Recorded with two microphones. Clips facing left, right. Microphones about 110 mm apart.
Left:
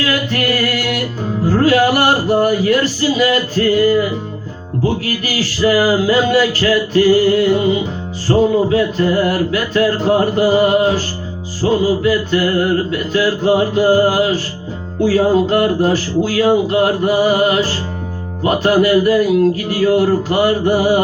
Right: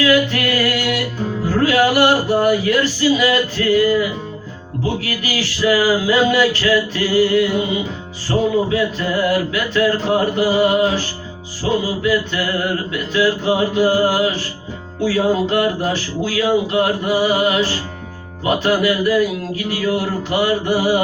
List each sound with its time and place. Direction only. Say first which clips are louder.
0.1 s a capella: right 2 dB; 40° left (ahead or behind)
1.5 s music: left 3 dB; 35° left (ahead or behind)
5.0 s music: left 3 dB; 35° left (ahead or behind)